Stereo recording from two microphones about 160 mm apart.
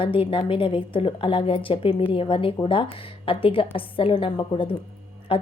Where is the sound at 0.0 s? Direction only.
35° left (ahead or behind).